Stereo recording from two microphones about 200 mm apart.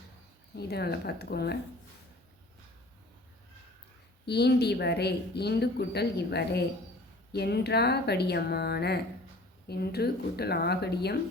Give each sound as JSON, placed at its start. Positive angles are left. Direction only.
{"t": 0.5, "sound": "speech", "side_deg": 55}
{"t": 4.3, "sound": "speech", "side_deg": 55}